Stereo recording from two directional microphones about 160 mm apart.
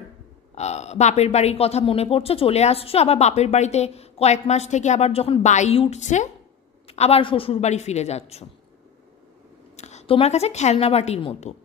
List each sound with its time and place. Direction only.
0.6 s a woman's voice: 45° left (ahead or behind)
9.8 s a woman's voice: 45° left (ahead or behind)